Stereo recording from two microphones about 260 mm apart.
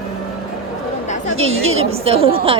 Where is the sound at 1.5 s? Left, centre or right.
Right.